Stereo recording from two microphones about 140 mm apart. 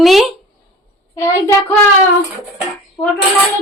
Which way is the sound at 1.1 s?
20° left (ahead or behind).